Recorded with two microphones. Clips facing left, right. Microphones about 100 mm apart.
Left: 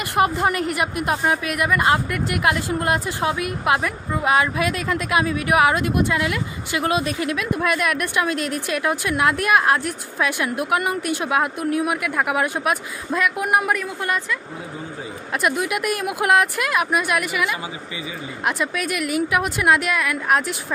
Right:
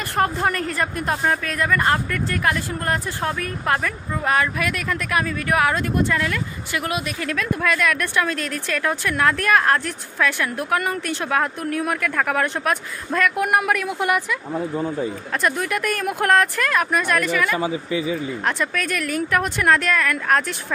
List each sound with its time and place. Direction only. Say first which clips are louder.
0.1 s a woman's voice: left 2 dB; 10° left (ahead or behind); by 7.2 s 30° left (ahead or behind)
7.2 s a woman's voice: even; 15° left (ahead or behind)
15.4 s a woman's voice: left 1 dB; 10° left (ahead or behind)